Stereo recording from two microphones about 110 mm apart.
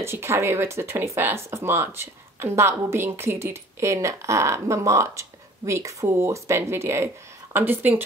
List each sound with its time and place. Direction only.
0.0 s speech: 25° right (ahead or behind)